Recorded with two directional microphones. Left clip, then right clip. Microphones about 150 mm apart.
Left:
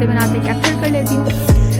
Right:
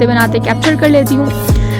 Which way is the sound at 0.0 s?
35° right (ahead or behind).